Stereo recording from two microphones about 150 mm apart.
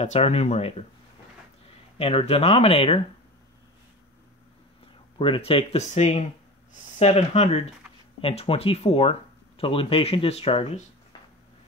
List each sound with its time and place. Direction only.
0.0 s speech: 45° left (ahead or behind)
2.0 s speech: 40° left (ahead or behind)
5.2 s speech: 35° left (ahead or behind)